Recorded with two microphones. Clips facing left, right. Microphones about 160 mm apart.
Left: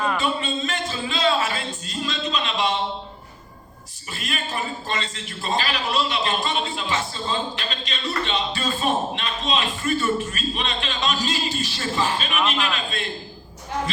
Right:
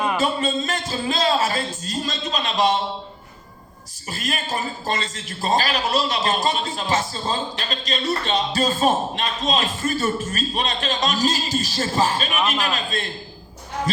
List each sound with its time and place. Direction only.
0.2 s a man's voice: 40° right (ahead or behind)
4.1 s a man's voice: 40° right (ahead or behind)